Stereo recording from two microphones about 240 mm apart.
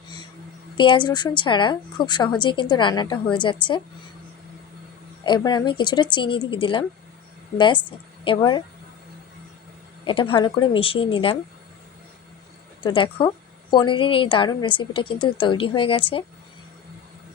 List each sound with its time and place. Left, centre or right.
0.8 s a woman's voice: centre
5.2 s a woman's voice: centre
10.0 s a woman's voice: left
12.8 s a woman's voice: centre